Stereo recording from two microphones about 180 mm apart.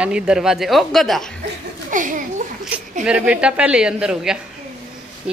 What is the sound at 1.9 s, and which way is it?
Speech, 45° right (ahead or behind).